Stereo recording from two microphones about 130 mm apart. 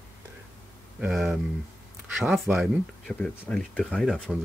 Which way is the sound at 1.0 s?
Centre (ahead or behind).